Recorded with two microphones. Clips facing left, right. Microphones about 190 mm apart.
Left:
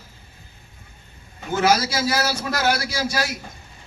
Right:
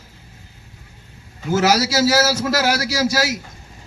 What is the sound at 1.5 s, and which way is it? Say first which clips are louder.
A man's voice: right 3 dB; 80° right.